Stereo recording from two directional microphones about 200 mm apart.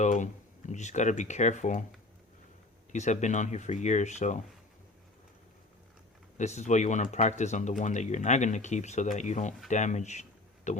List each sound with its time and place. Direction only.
0.0 s speech: 40° left (ahead or behind)
2.9 s speech: 35° left (ahead or behind)
6.3 s speech: 35° left (ahead or behind)